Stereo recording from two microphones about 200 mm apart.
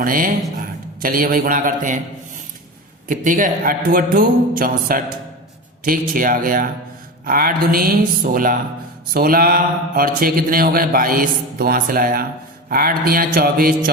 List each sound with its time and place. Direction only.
0.0 s speech: 45° right (ahead or behind)
3.1 s speech: 40° right (ahead or behind)